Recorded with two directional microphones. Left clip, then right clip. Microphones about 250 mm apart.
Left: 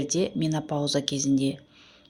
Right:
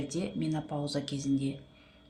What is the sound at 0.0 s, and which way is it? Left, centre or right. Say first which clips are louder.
Speech: left 8 dB; left.